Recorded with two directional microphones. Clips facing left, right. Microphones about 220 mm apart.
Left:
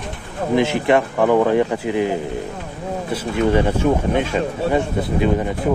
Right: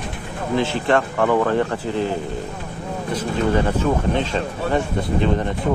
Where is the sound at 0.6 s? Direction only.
15° left (ahead or behind).